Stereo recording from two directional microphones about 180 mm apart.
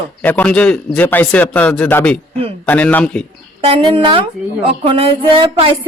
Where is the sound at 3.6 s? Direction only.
30° right (ahead or behind).